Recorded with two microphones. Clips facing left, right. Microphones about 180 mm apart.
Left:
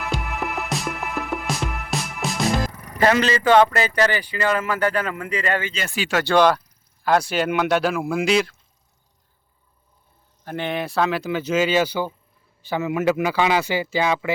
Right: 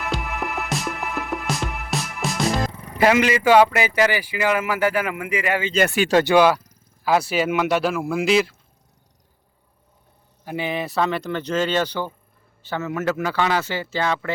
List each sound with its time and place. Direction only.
0.3 s music: centre (ahead or behind)
2.9 s speech: 10° right (ahead or behind)
5.7 s speech: 55° right (ahead or behind)
6.2 s speech: 10° right (ahead or behind)
10.4 s speech: 5° right (ahead or behind); by 14.3 s 10° left (ahead or behind)